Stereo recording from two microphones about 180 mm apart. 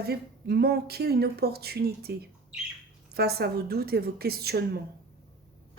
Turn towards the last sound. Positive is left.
turn(degrees=-60)  # may be behind; listen again after turning